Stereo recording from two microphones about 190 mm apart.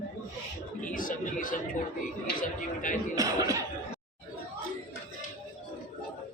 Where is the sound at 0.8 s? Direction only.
45° left (ahead or behind).